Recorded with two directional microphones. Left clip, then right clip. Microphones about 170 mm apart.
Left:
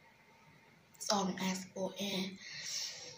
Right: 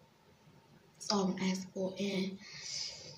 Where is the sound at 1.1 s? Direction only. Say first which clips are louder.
Even; 5° right (ahead or behind).